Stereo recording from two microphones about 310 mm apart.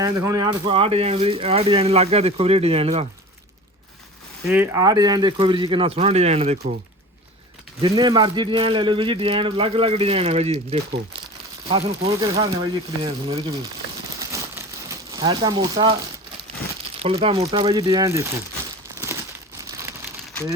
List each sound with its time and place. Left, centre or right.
0.0 s speech: centre
4.4 s speech: centre
7.8 s speech: centre
14.2 s crumpling: centre
17.0 s speech: centre